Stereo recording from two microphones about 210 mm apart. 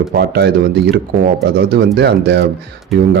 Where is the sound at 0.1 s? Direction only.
50° right (ahead or behind).